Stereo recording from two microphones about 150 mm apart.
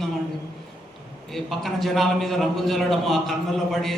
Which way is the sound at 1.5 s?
Centre (ahead or behind).